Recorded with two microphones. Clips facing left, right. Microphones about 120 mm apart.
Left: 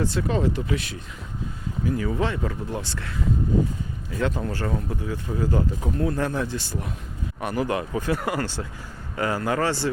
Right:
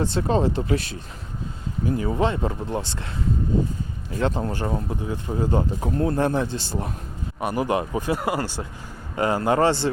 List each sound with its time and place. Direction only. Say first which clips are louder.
0.0 s speech: right 2 dB; 30° right (ahead or behind)
4.1 s speech: right 2 dB; 30° right (ahead or behind)
7.4 s speech: right 2 dB; 20° right (ahead or behind)
9.1 s speech: right 4 dB; 25° right (ahead or behind)